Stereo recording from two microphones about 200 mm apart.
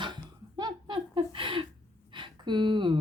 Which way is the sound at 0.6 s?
20° right (ahead or behind).